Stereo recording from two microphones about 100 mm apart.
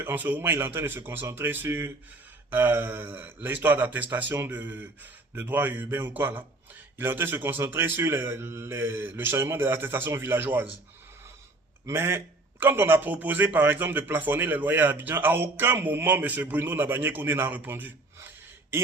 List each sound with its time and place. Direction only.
0.0 s a man's voice: 20° right (ahead or behind)
11.9 s a man's voice: 25° right (ahead or behind)